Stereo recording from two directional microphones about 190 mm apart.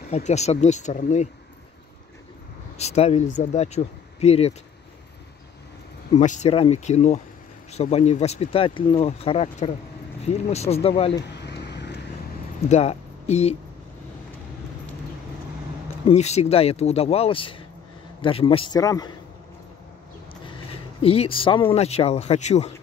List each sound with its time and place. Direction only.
0.1 s speech: 35° left (ahead or behind)
2.8 s speech: 35° left (ahead or behind)
6.1 s speech: 40° left (ahead or behind)
11.2 s a sound: 65° left (ahead or behind)
12.6 s speech: 35° left (ahead or behind)
16.1 s a man's voice: 35° left (ahead or behind); by 19.1 s 20° left (ahead or behind)
21.0 s speech: 30° left (ahead or behind)